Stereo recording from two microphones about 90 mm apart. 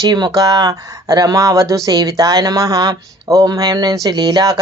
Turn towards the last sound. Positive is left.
turn(degrees=-45)  # may be behind; listen again after turning